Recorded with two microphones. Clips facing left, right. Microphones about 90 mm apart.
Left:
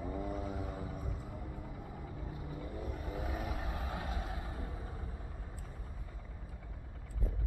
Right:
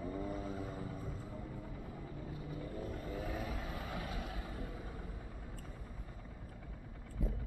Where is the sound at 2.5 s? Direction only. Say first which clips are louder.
Even; 15° left (ahead or behind); by 4.7 s 30° left (ahead or behind).